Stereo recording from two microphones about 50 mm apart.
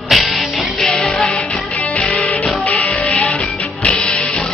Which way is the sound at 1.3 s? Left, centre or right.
Left.